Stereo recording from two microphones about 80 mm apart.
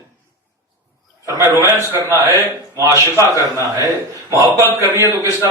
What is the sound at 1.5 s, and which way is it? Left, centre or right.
A man's voice, right.